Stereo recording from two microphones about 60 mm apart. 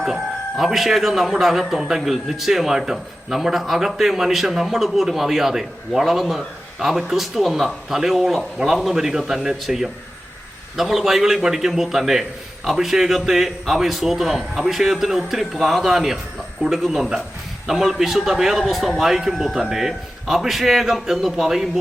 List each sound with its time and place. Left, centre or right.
0.0 s speech: centre